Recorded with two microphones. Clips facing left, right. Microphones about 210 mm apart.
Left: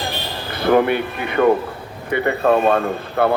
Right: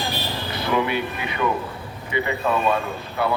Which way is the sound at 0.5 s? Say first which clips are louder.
Left 8 dB; 55° left (ahead or behind).